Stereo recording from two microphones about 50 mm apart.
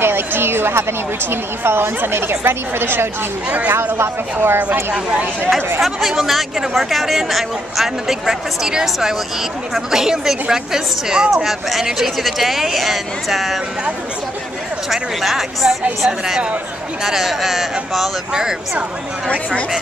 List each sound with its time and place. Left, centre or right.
0.0 s a woman's voice: right
3.4 s speech: right
3.9 s a woman's voice: right
5.8 s speech: centre
14.9 s speech: centre
16.1 s speech: centre
19.2 s speech: centre